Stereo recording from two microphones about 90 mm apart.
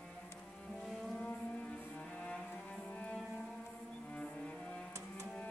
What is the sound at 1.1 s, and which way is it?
Vehicle, 10° left (ahead or behind).